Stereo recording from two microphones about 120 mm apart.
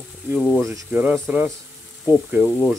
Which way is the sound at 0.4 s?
Centre (ahead or behind).